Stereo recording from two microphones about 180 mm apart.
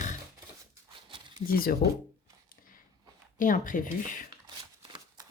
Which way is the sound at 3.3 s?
45° left (ahead or behind).